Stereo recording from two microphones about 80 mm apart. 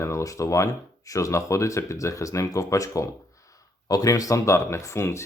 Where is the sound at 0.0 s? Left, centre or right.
Left.